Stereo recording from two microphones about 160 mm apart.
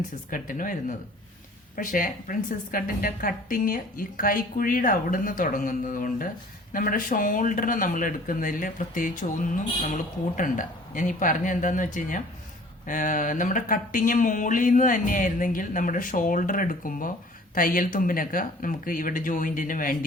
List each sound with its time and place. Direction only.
0.3 s a woman's voice: 60° left (ahead or behind)